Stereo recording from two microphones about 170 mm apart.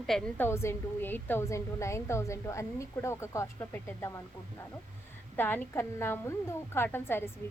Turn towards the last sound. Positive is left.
turn(degrees=15)  # may be behind; listen again after turning